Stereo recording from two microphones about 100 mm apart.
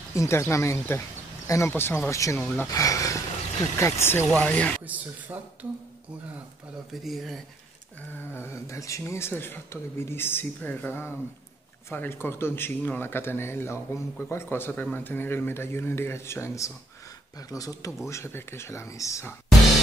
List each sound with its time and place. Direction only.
0.1 s speech: 30° left (ahead or behind)
3.8 s speech: 25° left (ahead or behind)
4.3 s speech: 10° left (ahead or behind)
4.8 s speech: 15° right (ahead or behind)
6.9 s speech: centre (ahead or behind)
8.3 s speech: 25° left (ahead or behind)